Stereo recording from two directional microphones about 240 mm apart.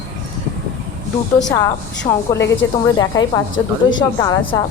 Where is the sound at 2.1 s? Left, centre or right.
Left.